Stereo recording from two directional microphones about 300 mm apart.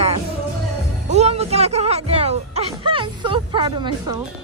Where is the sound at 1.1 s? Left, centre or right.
Right.